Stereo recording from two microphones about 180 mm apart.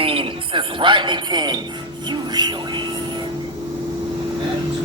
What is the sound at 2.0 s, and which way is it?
Speech, 25° right (ahead or behind).